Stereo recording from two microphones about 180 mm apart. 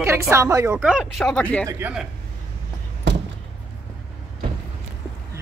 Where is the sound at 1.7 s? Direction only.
5° right (ahead or behind).